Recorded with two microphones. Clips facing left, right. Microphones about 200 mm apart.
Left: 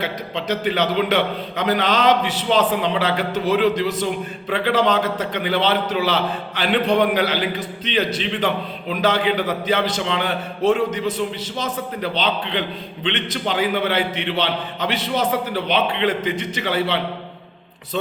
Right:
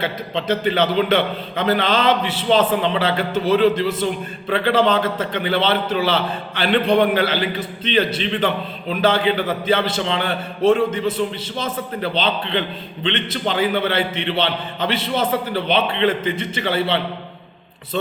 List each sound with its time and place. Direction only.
0.0 s a man's voice: 10° left (ahead or behind)
14.9 s a man's voice: 25° right (ahead or behind)
15.5 s a man's voice: 10° left (ahead or behind)